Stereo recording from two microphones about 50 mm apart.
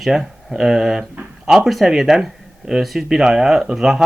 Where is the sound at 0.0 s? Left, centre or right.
Centre.